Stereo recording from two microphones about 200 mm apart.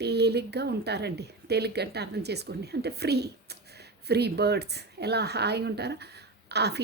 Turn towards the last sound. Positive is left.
turn(degrees=-55)  # may be behind; listen again after turning